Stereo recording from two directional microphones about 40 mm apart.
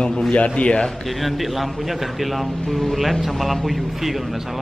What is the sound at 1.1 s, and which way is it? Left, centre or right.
A man's voice, centre.